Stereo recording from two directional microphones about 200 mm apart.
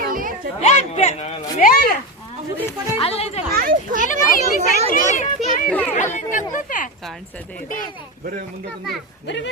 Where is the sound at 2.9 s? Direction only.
30° left (ahead or behind).